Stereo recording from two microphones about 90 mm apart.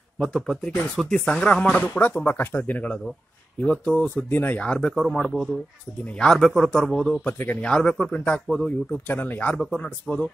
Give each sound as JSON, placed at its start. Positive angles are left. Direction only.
{"t": 0.2, "sound": "a man's voice", "side_deg": 5}
{"t": 7.2, "sound": "speech", "side_deg": 20}
{"t": 7.7, "sound": "speech", "side_deg": 10}
{"t": 9.0, "sound": "speech", "side_deg": 20}